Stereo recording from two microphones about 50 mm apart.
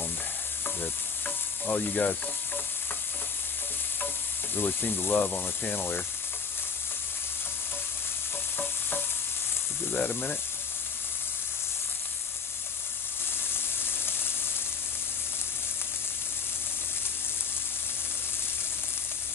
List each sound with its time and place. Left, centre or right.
1.2 s stir: left
4.6 s speech: left
9.9 s speech: left
13.5 s sizzle: left